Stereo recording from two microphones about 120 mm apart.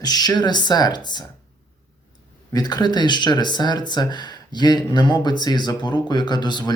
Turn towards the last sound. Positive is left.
turn(degrees=35)  # may be behind; listen again after turning